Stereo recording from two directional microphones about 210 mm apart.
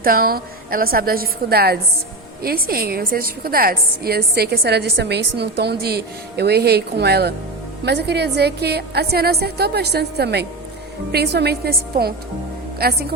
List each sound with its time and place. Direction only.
0.0 s a woman's voice: 45° right (ahead or behind)